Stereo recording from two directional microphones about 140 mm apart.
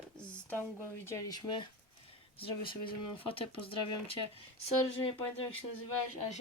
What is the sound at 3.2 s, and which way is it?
Speech, 40° left (ahead or behind).